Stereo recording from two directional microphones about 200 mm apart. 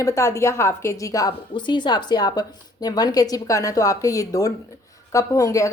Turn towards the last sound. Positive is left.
turn(degrees=15)  # may be behind; listen again after turning